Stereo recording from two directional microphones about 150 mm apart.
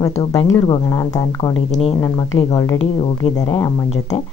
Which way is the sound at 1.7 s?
40° left (ahead or behind).